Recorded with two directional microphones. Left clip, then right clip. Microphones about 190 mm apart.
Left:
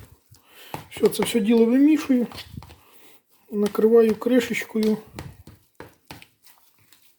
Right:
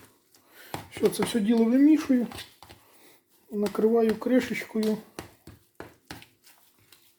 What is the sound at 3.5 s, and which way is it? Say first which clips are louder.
Speech: left 7 dB; 30° left (ahead or behind).